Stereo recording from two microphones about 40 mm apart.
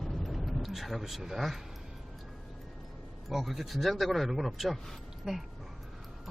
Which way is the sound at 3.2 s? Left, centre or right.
Centre.